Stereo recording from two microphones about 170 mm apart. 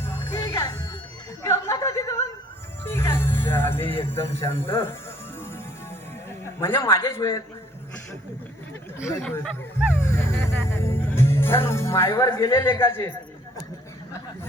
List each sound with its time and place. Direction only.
0.0 s music: 15° left (ahead or behind)
1.5 s a sound: 20° left (ahead or behind)
2.8 s music: 15° left (ahead or behind)
3.8 s music: 30° left (ahead or behind)
4.1 s speech: 15° left (ahead or behind)
6.6 s speech: 15° left (ahead or behind)
9.0 s speech: 15° left (ahead or behind)